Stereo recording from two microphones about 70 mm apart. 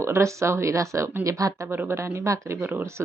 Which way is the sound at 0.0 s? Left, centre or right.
Right.